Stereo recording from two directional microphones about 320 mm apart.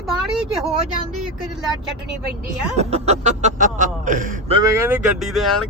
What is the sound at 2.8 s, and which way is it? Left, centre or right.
Speech, centre.